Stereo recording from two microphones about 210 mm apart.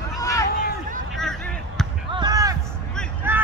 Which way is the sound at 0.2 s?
15° left (ahead or behind).